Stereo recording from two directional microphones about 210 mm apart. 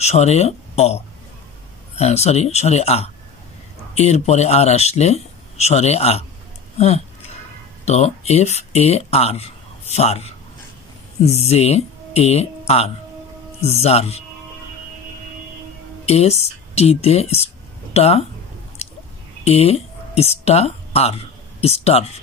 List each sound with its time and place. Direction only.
0.0 s speech: 30° left (ahead or behind)
7.8 s speech: 30° left (ahead or behind)
16.1 s speech: 30° left (ahead or behind)
19.4 s speech: 30° left (ahead or behind)